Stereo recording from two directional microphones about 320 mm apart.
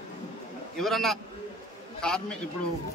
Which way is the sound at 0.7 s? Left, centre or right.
Centre.